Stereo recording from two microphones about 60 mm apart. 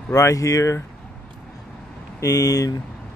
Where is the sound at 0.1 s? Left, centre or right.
Left.